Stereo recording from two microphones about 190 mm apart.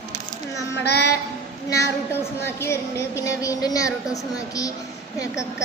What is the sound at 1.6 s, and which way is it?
A woman's voice, 15° left (ahead or behind).